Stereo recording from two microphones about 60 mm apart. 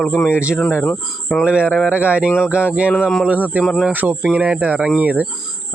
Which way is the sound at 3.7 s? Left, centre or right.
Centre.